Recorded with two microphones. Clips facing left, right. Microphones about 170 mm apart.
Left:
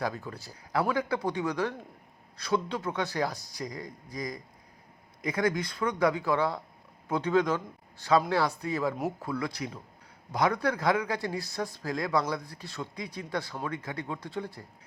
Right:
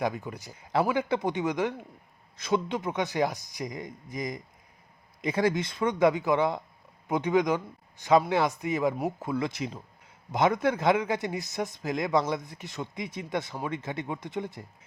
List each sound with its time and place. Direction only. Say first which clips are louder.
0.0 s speech: right 3 dB; 20° right (ahead or behind)